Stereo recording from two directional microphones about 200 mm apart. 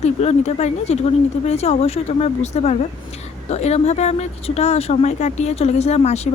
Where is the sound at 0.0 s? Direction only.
35° left (ahead or behind).